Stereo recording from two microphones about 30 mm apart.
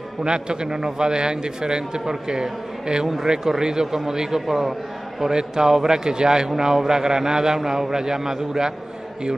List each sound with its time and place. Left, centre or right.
0.2 s a man's voice: right